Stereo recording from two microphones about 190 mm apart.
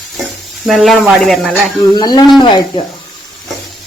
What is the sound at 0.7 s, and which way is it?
Speech, centre (ahead or behind).